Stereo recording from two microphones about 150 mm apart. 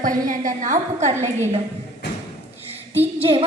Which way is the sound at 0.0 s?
60° right (ahead or behind).